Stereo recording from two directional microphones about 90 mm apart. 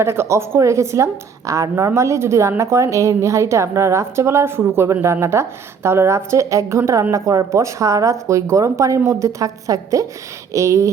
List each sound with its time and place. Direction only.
0.0 s a woman's voice: 30° right (ahead or behind)